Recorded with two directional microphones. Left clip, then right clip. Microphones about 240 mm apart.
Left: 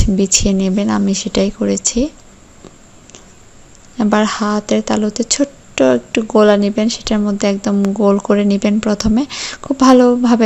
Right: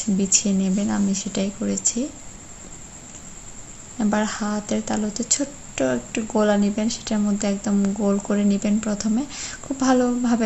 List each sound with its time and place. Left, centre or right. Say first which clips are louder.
0.0 s speech: left 7 dB; left
3.9 s speech: left 9 dB; left